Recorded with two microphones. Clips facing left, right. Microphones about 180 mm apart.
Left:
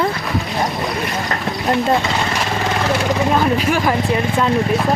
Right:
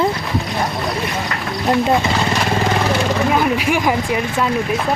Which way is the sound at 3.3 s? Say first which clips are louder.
Left 1 dB; 10° right (ahead or behind).